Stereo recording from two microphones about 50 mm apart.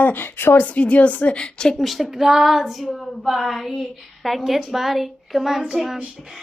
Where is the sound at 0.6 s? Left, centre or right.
Left.